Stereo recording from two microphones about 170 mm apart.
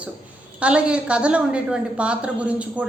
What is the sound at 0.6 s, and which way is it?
A woman's voice, 5° right (ahead or behind).